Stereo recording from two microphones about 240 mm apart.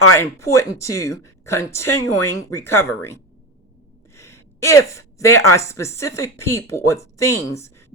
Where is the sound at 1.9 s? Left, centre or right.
Left.